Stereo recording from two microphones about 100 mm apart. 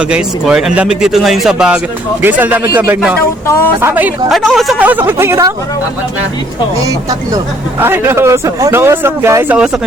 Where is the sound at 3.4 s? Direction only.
30° left (ahead or behind).